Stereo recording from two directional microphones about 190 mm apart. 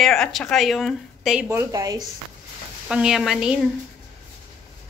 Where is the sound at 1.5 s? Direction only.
15° right (ahead or behind).